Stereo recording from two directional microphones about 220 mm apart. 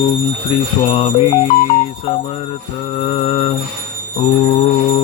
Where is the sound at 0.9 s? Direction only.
25° left (ahead or behind).